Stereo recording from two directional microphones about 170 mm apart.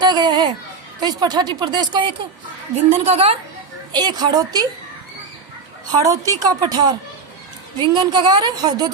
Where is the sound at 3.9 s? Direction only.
25° right (ahead or behind).